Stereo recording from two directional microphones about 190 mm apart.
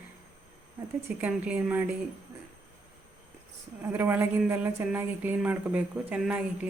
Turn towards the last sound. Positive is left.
turn(degrees=-5)  # may be behind; listen again after turning